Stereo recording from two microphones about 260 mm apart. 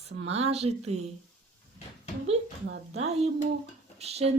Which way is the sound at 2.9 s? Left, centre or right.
Right.